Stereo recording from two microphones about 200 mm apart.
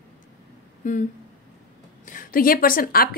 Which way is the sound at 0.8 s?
40° left (ahead or behind).